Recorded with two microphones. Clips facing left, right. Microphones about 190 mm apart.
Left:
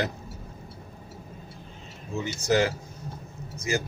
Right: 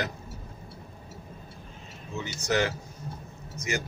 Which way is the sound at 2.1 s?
30° left (ahead or behind).